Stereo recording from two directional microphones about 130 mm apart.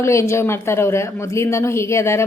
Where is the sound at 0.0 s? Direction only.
20° left (ahead or behind).